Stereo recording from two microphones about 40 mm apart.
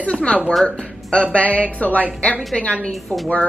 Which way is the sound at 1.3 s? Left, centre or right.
Left.